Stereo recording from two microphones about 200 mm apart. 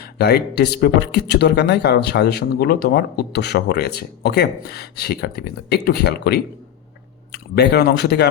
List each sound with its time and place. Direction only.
0.0 s speech: 55° left (ahead or behind)